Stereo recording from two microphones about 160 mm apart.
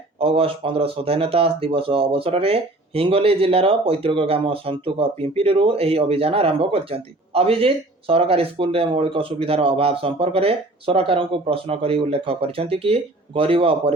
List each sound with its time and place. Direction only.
0.2 s speech: 35° right (ahead or behind)